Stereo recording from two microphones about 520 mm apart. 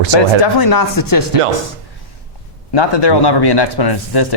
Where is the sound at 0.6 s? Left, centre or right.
Left.